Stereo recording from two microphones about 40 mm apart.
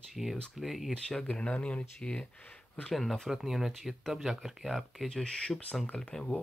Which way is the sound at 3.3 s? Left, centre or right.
Centre.